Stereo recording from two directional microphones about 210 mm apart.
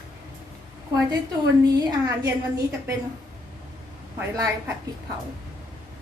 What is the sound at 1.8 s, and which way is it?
A woman's voice, 15° right (ahead or behind).